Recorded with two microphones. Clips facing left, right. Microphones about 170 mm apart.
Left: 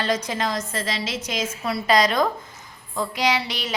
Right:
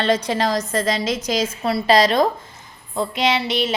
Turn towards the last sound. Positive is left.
turn(degrees=-25)  # may be behind; listen again after turning